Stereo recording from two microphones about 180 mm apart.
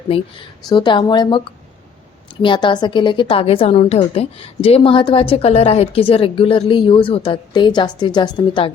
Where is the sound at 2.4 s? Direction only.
25° left (ahead or behind).